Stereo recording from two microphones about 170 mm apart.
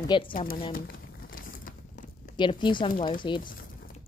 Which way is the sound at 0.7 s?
55° left (ahead or behind).